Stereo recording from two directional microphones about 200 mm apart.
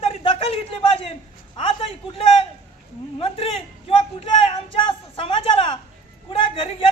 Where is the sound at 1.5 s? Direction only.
30° left (ahead or behind).